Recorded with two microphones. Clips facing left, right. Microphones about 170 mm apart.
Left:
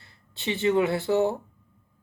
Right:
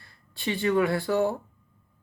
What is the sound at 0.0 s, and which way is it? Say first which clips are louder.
Speech: right 1 dB; 20° left (ahead or behind).